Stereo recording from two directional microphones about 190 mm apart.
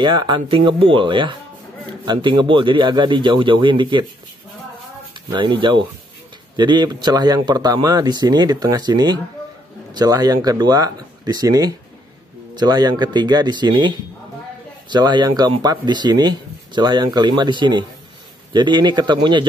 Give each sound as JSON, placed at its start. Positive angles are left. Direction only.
{"t": 0.0, "sound": "speech", "side_deg": -25}
{"t": 5.4, "sound": "speech", "side_deg": -25}